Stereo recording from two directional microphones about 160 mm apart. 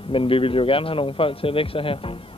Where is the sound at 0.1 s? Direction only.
35° left (ahead or behind).